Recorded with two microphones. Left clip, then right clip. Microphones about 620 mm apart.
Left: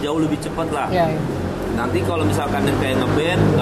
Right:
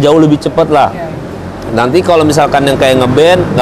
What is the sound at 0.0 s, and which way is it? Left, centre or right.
Speech, right.